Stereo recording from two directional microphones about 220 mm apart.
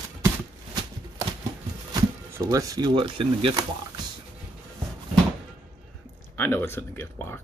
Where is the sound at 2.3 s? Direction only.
15° right (ahead or behind).